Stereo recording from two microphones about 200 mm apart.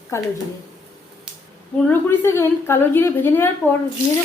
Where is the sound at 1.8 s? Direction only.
15° left (ahead or behind).